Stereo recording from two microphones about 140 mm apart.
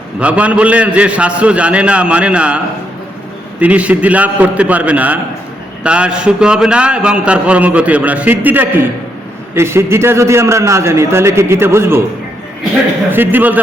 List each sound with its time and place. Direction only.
0.2 s a man's voice: 10° right (ahead or behind)
3.6 s a man's voice: 10° right (ahead or behind)
13.1 s a man's voice: 15° right (ahead or behind)